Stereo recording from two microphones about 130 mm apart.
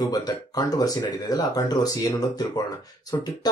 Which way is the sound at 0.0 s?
30° left (ahead or behind).